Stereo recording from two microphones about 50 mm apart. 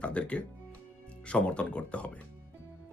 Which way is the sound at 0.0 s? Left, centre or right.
Left.